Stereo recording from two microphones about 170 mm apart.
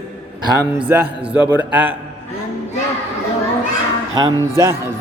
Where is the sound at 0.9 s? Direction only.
10° right (ahead or behind).